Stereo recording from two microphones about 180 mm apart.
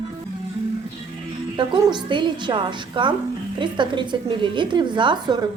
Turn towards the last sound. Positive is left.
turn(degrees=-25)  # may be behind; listen again after turning